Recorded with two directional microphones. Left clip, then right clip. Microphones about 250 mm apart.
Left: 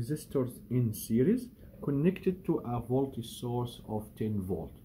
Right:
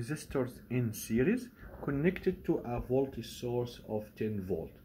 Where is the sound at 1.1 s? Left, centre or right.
Right.